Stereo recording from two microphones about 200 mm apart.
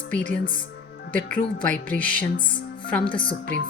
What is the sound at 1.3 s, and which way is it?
A woman's voice, 5° left (ahead or behind).